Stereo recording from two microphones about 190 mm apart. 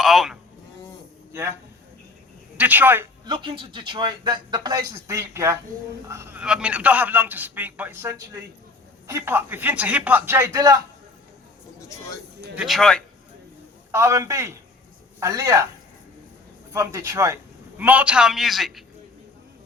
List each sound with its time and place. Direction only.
0.0 s insect: centre (ahead or behind)
1.3 s a man's voice: 15° right (ahead or behind)
2.6 s a man's voice: 10° right (ahead or behind)
3.2 s a man's voice: 25° right (ahead or behind)
12.5 s a man's voice: centre (ahead or behind)
13.9 s a man's voice: 15° right (ahead or behind)
16.7 s a man's voice: 15° right (ahead or behind)